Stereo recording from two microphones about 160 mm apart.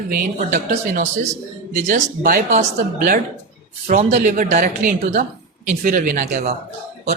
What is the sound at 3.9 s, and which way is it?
Speech, 50° right (ahead or behind).